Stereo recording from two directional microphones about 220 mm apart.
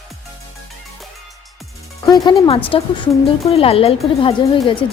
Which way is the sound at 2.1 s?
25° left (ahead or behind).